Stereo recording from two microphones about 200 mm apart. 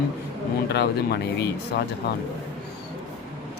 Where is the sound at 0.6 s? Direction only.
55° left (ahead or behind).